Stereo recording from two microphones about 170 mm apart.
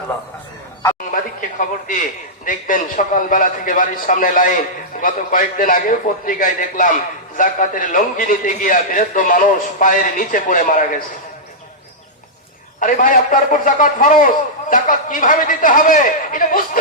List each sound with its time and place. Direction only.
1.1 s a man's voice: 50° left (ahead or behind)
12.8 s a man's voice: 50° left (ahead or behind)